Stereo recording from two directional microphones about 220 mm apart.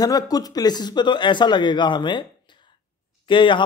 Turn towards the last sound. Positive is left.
turn(degrees=20)  # may be behind; listen again after turning